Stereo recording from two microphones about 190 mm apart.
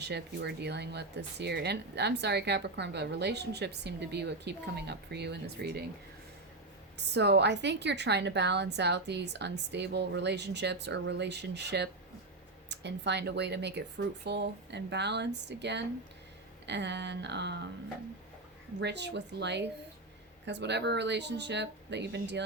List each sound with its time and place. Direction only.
0.0 s speech: 60° right (ahead or behind)
7.1 s speech: 60° right (ahead or behind)
18.8 s speech: 65° right (ahead or behind)